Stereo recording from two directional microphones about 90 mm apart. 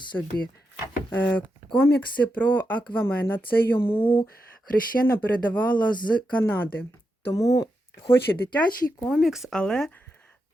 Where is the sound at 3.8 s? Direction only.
75° left (ahead or behind).